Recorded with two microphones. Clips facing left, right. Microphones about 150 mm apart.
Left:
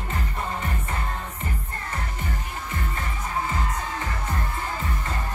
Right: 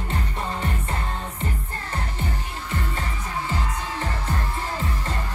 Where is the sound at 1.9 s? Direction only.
30° right (ahead or behind).